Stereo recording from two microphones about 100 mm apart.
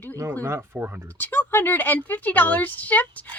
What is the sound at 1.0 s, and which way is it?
Speech, 15° left (ahead or behind).